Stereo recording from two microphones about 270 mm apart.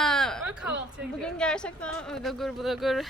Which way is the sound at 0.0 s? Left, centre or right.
Centre.